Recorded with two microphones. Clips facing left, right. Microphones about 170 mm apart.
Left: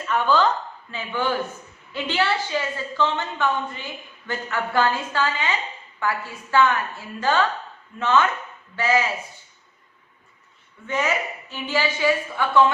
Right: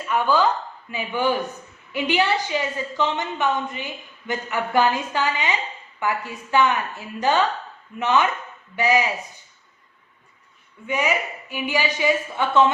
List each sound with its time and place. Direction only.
0.0 s a woman's voice: 10° right (ahead or behind)
10.8 s a woman's voice: 15° right (ahead or behind)